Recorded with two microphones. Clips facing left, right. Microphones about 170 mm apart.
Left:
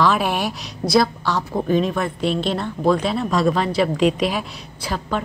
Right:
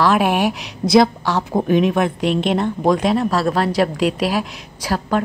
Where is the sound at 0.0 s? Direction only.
10° right (ahead or behind).